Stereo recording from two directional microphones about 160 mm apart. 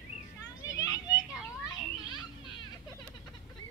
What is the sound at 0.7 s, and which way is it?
Children playing, 20° left (ahead or behind).